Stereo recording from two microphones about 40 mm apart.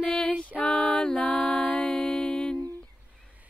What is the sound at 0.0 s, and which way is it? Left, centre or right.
Female singing, left.